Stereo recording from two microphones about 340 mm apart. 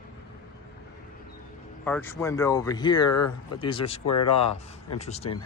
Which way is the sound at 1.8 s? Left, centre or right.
Centre.